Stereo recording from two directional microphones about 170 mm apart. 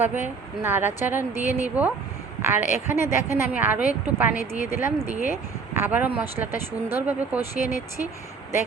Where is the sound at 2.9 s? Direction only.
15° right (ahead or behind).